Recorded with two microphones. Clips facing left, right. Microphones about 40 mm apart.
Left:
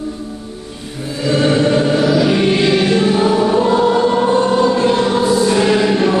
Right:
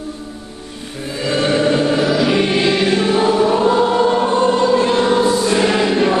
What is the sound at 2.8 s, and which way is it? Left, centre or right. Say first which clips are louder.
Choir: left 1 dB; centre.